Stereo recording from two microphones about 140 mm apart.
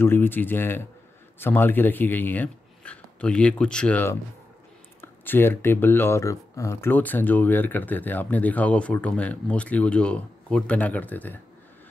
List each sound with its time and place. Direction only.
0.0 s speech: 15° left (ahead or behind)